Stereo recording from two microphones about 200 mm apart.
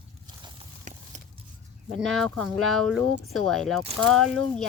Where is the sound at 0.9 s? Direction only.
40° right (ahead or behind).